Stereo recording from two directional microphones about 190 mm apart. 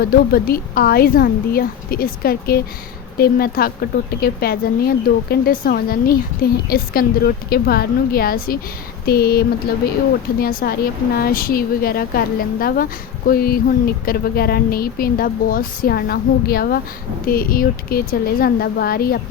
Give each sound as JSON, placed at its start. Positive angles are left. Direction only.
{"t": 0.0, "sound": "a woman's voice", "side_deg": 55}
{"t": 9.0, "sound": "a sound", "side_deg": 55}
{"t": 10.4, "sound": "a woman's voice", "side_deg": 50}